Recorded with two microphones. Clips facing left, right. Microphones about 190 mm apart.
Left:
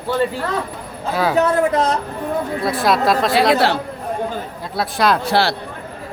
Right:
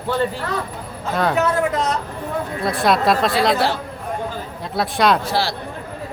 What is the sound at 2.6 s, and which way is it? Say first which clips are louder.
Speech: even; centre (ahead or behind).